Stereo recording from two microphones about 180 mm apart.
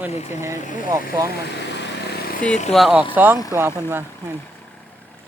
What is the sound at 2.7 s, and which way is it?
Speech, centre (ahead or behind).